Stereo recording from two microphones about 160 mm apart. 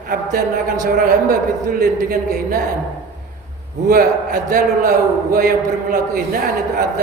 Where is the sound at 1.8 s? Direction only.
65° right (ahead or behind).